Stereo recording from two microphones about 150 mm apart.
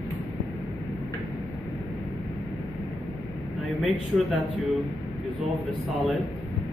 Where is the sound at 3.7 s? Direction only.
Centre (ahead or behind).